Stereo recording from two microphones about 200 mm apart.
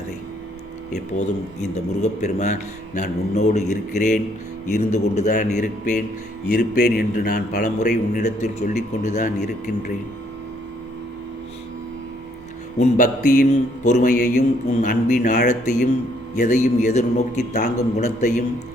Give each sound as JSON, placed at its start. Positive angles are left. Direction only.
{"t": 0.9, "sound": "speech", "side_deg": 35}
{"t": 6.5, "sound": "speech", "side_deg": 50}
{"t": 12.8, "sound": "speech", "side_deg": 45}